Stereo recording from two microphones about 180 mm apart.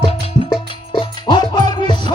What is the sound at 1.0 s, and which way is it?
Music, 25° left (ahead or behind).